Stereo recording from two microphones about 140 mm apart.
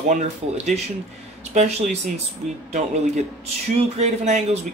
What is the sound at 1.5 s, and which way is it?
Speech, 55° right (ahead or behind).